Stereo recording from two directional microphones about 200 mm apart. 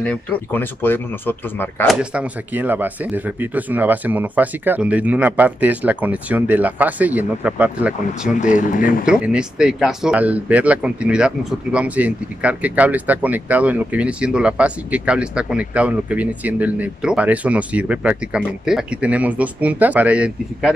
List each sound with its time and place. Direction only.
0.0 s speech: 5° left (ahead or behind)
2.0 s speech: 5° right (ahead or behind)
8.4 s speech: 40° left (ahead or behind)
9.0 s speech: 5° right (ahead or behind)